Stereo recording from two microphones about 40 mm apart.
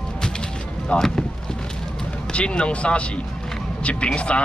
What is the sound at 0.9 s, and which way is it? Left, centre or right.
Speech, left.